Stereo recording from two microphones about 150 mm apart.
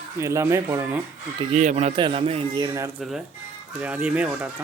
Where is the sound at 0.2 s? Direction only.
20° right (ahead or behind).